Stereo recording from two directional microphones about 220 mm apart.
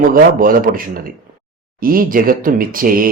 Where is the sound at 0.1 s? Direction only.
40° right (ahead or behind).